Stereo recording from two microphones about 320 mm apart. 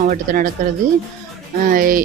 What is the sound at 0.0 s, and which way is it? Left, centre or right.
Speech, right.